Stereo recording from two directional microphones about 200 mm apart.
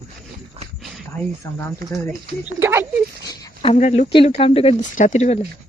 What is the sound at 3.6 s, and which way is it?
Speech, 30° left (ahead or behind).